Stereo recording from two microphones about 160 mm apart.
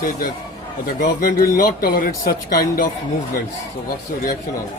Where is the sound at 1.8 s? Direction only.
70° left (ahead or behind).